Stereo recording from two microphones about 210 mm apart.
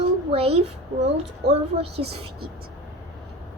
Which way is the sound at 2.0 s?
50° right (ahead or behind).